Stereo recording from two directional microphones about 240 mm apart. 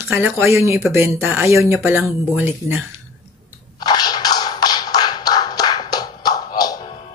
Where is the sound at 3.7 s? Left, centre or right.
Centre.